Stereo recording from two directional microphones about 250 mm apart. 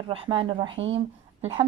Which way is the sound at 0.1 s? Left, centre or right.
Right.